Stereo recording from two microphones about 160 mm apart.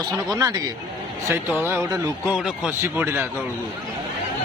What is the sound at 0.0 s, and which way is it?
Speech, 20° right (ahead or behind).